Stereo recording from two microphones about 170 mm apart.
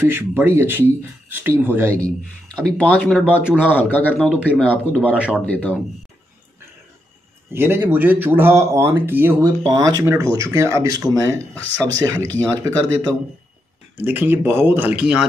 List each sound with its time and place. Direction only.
0.1 s speech: 10° right (ahead or behind)
2.0 s speech: 5° left (ahead or behind)
3.4 s speech: 5° right (ahead or behind)
3.9 s speech: 10° left (ahead or behind)
5.1 s speech: 5° right (ahead or behind)
5.4 s speech: 10° left (ahead or behind)
7.5 s speech: 15° right (ahead or behind)
9.4 s speech: 30° right (ahead or behind); by 15.2 s 5° right (ahead or behind)